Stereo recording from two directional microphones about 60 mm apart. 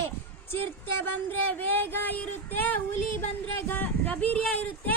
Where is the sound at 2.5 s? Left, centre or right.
Left.